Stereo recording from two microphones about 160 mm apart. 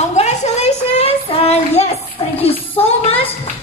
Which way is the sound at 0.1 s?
45° left (ahead or behind).